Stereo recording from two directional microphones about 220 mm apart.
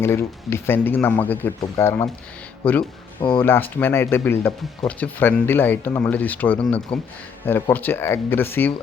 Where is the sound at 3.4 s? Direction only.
10° left (ahead or behind).